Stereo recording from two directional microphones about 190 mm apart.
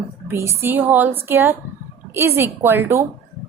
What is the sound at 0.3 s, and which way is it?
A woman's voice, 15° right (ahead or behind).